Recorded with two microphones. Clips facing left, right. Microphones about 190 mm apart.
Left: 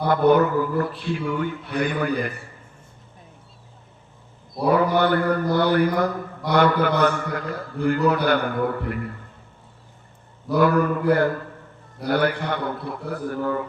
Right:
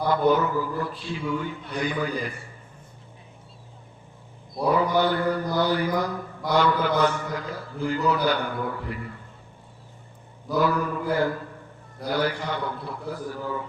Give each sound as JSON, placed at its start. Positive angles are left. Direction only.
{"t": 0.1, "sound": "a man's voice", "side_deg": 60}
{"t": 4.6, "sound": "a man's voice", "side_deg": 60}
{"t": 10.5, "sound": "a man's voice", "side_deg": 60}